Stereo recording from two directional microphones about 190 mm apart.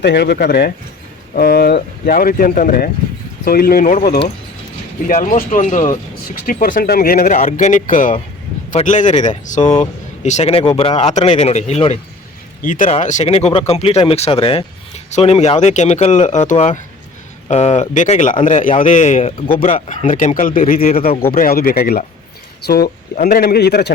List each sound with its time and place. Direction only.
0.0 s speech: 60° left (ahead or behind); by 11.9 s 35° left (ahead or behind)
12.6 s speech: 45° left (ahead or behind)